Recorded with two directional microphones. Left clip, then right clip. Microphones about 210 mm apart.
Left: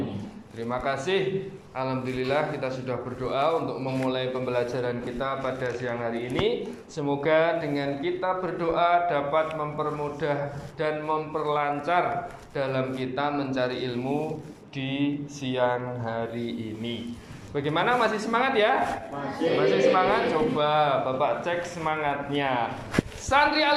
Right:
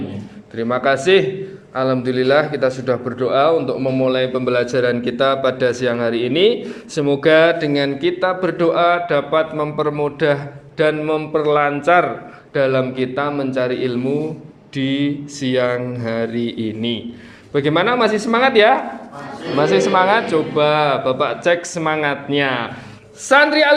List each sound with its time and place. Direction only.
0.5 s a man's voice: 45° right (ahead or behind)